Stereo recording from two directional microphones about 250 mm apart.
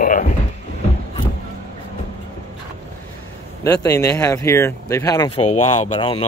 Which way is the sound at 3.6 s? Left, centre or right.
Centre.